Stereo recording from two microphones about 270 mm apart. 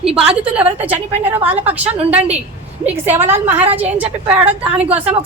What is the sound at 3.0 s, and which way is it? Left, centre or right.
A woman's voice, centre.